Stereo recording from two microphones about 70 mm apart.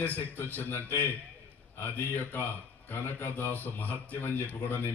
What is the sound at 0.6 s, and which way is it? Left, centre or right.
Speech, left.